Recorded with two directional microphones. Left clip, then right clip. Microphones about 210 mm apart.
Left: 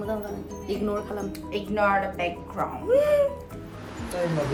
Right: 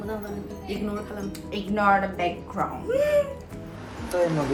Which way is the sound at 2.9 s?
20° left (ahead or behind).